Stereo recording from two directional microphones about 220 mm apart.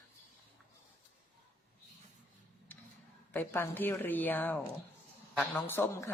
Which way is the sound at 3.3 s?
10° left (ahead or behind).